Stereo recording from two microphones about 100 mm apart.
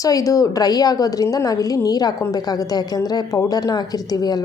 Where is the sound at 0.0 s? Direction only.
35° left (ahead or behind).